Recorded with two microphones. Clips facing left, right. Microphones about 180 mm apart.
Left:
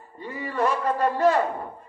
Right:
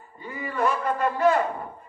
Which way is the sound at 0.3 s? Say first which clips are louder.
Left 1 dB; 35° left (ahead or behind).